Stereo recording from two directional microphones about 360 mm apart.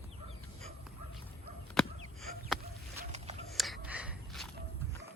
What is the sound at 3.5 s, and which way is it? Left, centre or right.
Gasp, centre.